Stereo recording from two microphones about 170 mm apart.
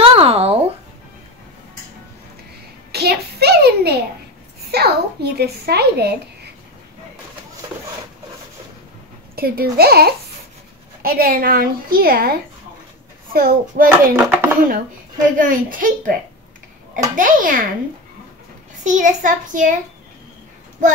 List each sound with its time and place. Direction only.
0.0 s a sound: 35° right (ahead or behind)
2.9 s a sound: 70° right (ahead or behind)
4.6 s a child's voice: 70° right (ahead or behind)
9.3 s a woman's voice: 65° right (ahead or behind)
13.8 s speech: 10° right (ahead or behind)
15.3 s a child's voice: 55° right (ahead or behind)
18.9 s a child's voice: 50° right (ahead or behind)